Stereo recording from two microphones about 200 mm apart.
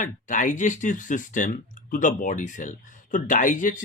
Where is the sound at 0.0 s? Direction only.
40° left (ahead or behind).